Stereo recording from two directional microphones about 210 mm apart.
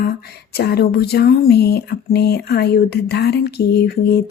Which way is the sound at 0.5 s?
50° left (ahead or behind).